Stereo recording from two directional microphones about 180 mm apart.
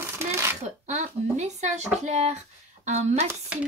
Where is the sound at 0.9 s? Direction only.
40° right (ahead or behind).